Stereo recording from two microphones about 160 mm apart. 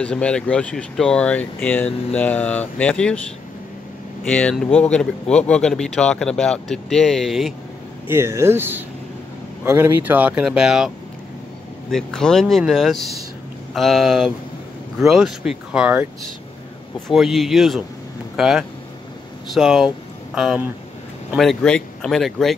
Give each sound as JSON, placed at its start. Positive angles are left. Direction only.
{"t": 0.0, "sound": "speech", "side_deg": 5}
{"t": 4.2, "sound": "speech", "side_deg": 5}
{"t": 8.1, "sound": "speech", "side_deg": -15}
{"t": 11.9, "sound": "speech", "side_deg": 5}
{"t": 17.1, "sound": "speech", "side_deg": 0}